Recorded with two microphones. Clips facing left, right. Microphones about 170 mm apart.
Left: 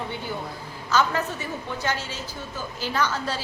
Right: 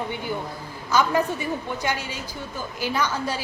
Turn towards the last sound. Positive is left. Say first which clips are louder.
# right 1 dB
turn(degrees=-15)  # may be behind; listen again after turning